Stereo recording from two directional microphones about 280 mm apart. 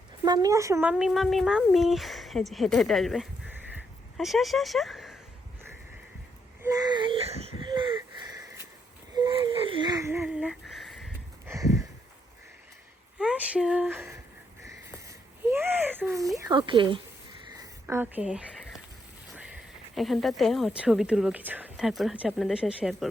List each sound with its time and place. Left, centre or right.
0.3 s speech: centre
6.6 s baby cry: centre
7.6 s wheeze: centre
9.1 s a sound: centre
13.1 s speech: centre
14.6 s a sound: centre
16.5 s speech: centre
17.6 s a sound: centre
19.3 s speech: centre